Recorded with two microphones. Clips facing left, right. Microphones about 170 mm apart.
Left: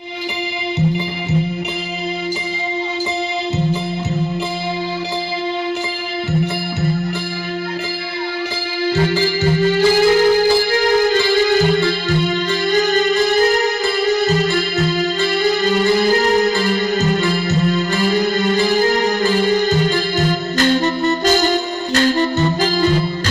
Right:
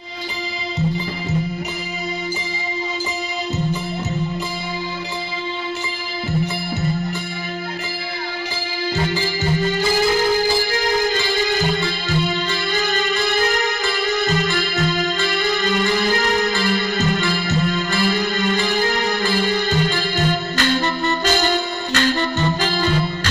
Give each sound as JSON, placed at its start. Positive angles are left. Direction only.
{"t": 8.8, "sound": "music", "side_deg": 70}